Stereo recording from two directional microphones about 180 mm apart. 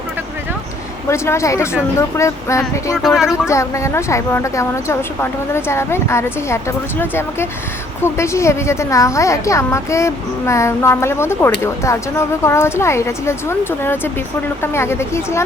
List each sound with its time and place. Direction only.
1.1 s a woman's voice: 15° left (ahead or behind)
3.0 s speech: centre (ahead or behind)
3.5 s a woman's voice: 15° left (ahead or behind)